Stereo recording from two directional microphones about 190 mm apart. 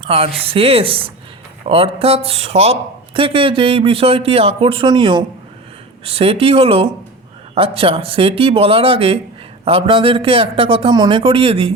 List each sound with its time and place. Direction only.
0.0 s a man's voice: 30° right (ahead or behind)